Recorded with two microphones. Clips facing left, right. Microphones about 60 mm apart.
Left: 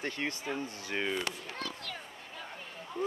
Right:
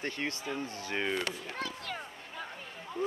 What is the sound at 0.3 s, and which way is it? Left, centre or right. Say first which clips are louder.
Speech: even; left.